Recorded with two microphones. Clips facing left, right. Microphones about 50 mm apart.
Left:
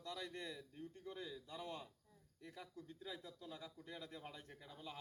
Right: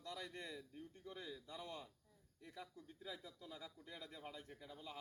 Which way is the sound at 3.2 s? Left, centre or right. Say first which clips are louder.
Left 2 dB; left.